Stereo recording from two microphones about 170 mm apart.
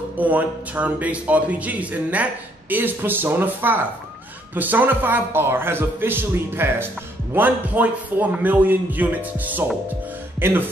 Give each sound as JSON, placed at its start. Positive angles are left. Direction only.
{"t": 0.2, "sound": "a man's voice", "side_deg": -10}